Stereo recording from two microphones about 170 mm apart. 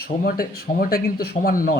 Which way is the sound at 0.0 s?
60° left (ahead or behind).